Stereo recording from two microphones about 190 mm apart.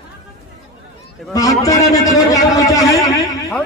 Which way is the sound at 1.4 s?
20° left (ahead or behind).